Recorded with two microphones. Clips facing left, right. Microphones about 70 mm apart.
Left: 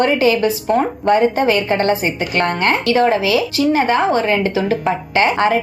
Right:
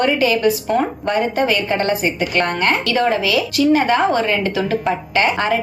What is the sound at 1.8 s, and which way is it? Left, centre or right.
A woman's voice, left.